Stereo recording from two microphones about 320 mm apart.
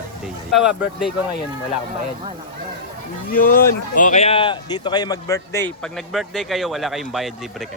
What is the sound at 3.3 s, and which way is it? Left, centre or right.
Speech, left.